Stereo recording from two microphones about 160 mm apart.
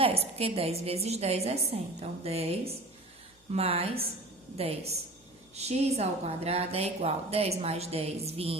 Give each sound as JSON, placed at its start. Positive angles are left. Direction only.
{"t": 0.0, "sound": "a woman's voice", "side_deg": -40}